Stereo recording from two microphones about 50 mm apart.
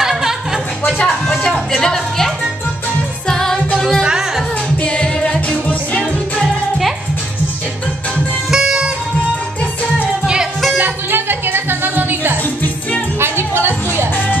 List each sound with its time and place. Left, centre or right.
0.0 s music: centre
1.0 s music: centre
4.8 s music: centre
8.5 s music: centre
10.8 s music: right